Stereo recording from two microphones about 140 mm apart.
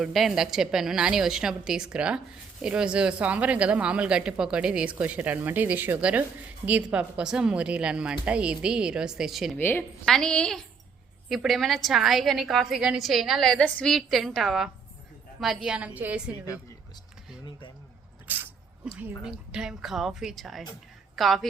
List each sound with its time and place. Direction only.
0.0 s a woman's voice: centre (ahead or behind)
9.6 s a woman's voice: 15° left (ahead or behind)
10.1 s a woman's voice: 5° left (ahead or behind)
18.3 s dog: 15° right (ahead or behind)
18.9 s a woman's voice: 10° right (ahead or behind)